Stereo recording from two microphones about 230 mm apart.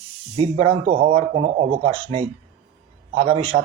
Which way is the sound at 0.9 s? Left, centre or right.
Right.